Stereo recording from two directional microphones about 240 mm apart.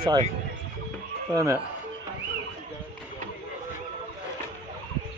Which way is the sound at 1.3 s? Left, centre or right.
Centre.